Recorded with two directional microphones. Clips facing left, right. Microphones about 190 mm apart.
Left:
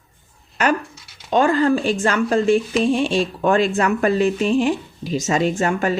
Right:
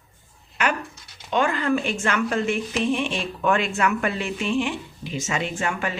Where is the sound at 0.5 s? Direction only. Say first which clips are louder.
Left 6 dB; 40° left (ahead or behind).